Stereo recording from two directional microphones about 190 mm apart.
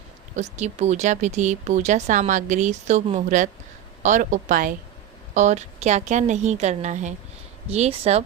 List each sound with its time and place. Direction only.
0.5 s a woman's voice: 35° right (ahead or behind)